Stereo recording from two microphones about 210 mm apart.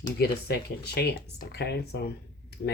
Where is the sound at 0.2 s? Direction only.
50° left (ahead or behind).